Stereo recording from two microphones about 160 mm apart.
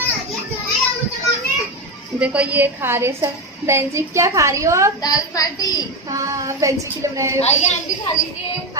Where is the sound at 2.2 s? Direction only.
10° right (ahead or behind).